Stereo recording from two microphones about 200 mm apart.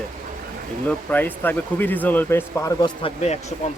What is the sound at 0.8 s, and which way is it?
Speech, 10° left (ahead or behind).